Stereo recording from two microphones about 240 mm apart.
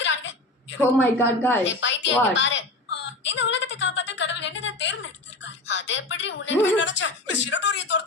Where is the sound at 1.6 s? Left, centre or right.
Left.